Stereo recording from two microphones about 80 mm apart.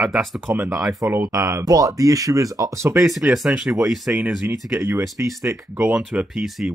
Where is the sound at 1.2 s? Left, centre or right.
Right.